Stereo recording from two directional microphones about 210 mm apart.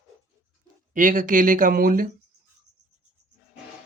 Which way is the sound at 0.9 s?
40° right (ahead or behind).